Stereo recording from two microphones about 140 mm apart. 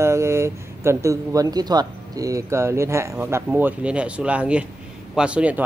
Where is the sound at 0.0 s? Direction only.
20° right (ahead or behind).